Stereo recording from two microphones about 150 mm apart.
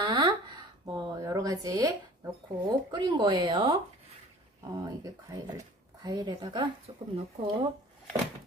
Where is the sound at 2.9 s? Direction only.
30° right (ahead or behind).